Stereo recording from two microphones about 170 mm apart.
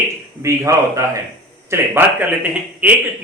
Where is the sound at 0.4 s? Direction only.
15° right (ahead or behind).